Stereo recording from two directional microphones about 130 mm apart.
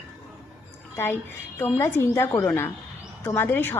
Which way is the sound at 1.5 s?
15° left (ahead or behind).